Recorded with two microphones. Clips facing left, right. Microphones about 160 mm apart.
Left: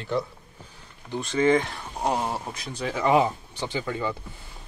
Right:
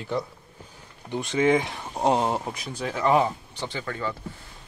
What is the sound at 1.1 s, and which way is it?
Speech, 15° right (ahead or behind).